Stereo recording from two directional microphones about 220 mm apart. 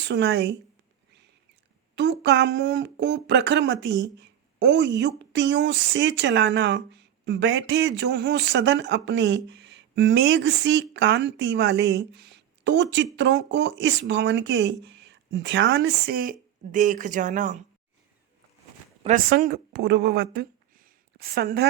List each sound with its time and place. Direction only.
0.0 s speech: 50° right (ahead or behind)
2.0 s speech: 50° right (ahead or behind); by 17.6 s 35° right (ahead or behind)
19.0 s speech: 40° right (ahead or behind)